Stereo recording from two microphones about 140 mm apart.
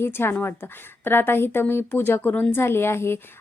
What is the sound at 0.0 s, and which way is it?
A woman's voice, 15° left (ahead or behind).